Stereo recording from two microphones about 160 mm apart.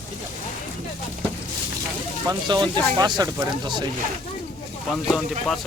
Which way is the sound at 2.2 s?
25° right (ahead or behind).